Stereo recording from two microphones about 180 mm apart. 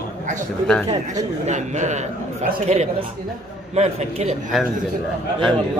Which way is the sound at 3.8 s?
40° right (ahead or behind).